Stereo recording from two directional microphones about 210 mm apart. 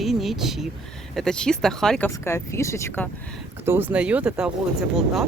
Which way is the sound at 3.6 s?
10° right (ahead or behind).